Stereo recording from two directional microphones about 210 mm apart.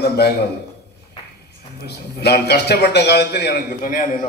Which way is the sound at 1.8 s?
50° left (ahead or behind).